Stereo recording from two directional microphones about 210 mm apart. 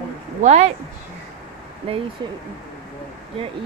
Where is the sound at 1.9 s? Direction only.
25° right (ahead or behind).